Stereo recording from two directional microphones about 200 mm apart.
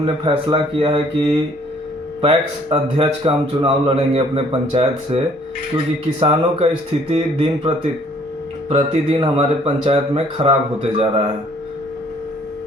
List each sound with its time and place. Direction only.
0.0 s a man's voice: 25° right (ahead or behind)
8.7 s a man's voice: 35° right (ahead or behind)